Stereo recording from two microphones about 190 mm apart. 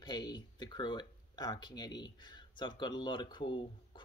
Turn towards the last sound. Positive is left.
turn(degrees=25)  # may be behind; listen again after turning